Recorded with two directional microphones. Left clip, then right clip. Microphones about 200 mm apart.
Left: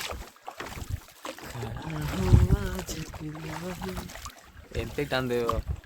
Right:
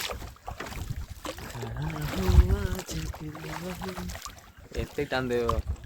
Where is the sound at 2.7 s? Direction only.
45° right (ahead or behind).